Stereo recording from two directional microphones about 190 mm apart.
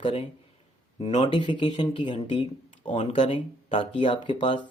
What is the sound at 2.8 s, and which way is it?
Speech, 35° left (ahead or behind).